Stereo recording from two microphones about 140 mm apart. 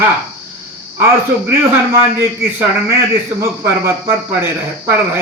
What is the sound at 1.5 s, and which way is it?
A man's voice, 20° right (ahead or behind).